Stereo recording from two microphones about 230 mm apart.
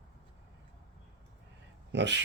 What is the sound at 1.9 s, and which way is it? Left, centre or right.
Speech, right.